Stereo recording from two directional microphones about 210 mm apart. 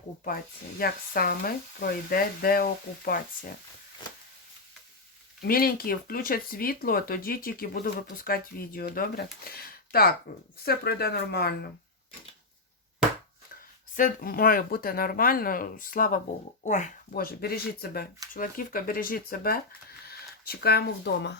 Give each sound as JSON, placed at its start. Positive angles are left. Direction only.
{"t": 0.8, "sound": "speech", "side_deg": 45}
{"t": 4.0, "sound": "a sound", "side_deg": 20}
{"t": 5.4, "sound": "speech", "side_deg": 45}
{"t": 13.9, "sound": "speech", "side_deg": 40}